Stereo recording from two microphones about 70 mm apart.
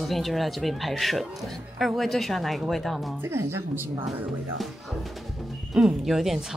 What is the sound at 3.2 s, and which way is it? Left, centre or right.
Speech, right.